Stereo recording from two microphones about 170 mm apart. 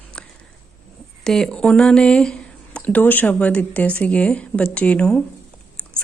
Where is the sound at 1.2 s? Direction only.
5° left (ahead or behind).